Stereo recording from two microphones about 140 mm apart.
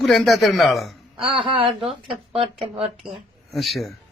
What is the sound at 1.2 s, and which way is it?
Speech, 35° right (ahead or behind).